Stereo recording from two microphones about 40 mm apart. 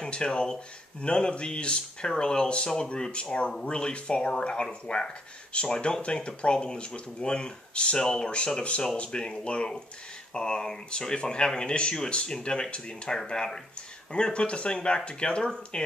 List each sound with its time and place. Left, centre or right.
0.0 s speech: left